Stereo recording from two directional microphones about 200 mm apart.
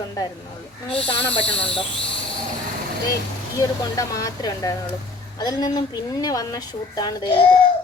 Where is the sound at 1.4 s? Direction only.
25° left (ahead or behind).